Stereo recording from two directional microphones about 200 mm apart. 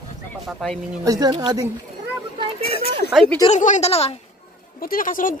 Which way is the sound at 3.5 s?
35° left (ahead or behind).